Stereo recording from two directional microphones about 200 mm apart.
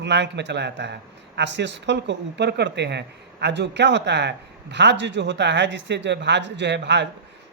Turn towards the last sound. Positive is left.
turn(degrees=-60)  # may be behind; listen again after turning